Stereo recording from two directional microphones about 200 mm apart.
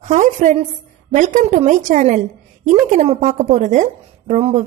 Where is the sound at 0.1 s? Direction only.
35° right (ahead or behind).